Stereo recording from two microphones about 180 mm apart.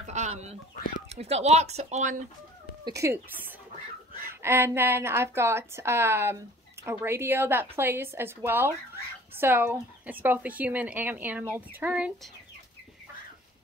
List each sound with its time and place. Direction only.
0.0 s chicken: 40° right (ahead or behind)
1.0 s speech: 35° right (ahead or behind)
2.8 s a woman's voice: 15° right (ahead or behind)